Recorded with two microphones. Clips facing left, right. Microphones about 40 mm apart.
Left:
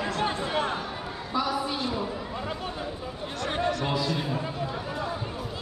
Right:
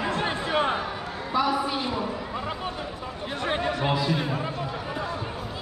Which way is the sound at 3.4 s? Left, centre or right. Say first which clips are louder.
Right 2 dB; right.